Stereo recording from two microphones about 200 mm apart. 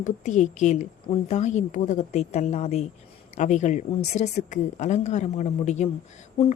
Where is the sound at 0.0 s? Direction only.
35° left (ahead or behind).